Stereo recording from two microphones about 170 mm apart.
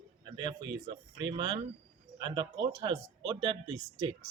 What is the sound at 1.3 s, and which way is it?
Speech, 25° right (ahead or behind).